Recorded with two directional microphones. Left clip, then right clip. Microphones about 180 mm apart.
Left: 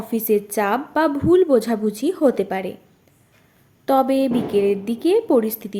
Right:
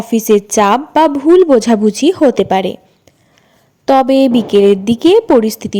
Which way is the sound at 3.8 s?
35° right (ahead or behind).